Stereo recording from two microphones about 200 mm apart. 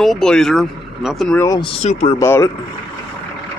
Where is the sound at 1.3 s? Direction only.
20° left (ahead or behind).